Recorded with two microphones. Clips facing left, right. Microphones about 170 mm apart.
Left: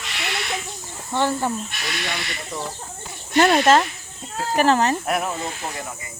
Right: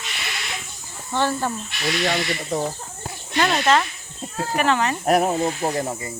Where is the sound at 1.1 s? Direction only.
10° left (ahead or behind).